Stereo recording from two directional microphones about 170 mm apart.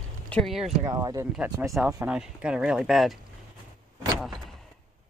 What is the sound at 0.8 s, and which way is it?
Speech, 20° right (ahead or behind).